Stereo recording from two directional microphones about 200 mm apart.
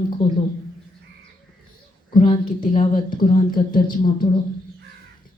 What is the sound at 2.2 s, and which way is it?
A woman's voice, 40° left (ahead or behind).